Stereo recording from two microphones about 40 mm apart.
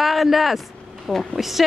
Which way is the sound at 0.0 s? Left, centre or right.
Centre.